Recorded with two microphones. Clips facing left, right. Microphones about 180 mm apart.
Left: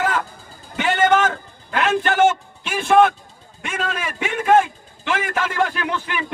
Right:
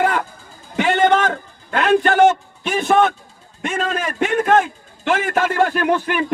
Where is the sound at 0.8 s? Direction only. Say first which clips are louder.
Right 2 dB; 30° right (ahead or behind).